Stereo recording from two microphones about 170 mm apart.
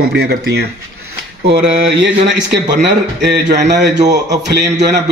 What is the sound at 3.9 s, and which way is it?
Speech, 20° right (ahead or behind).